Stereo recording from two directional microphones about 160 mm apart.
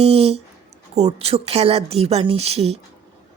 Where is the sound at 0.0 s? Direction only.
40° right (ahead or behind).